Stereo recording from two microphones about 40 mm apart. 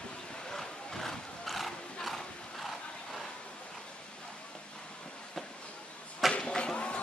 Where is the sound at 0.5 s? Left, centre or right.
Centre.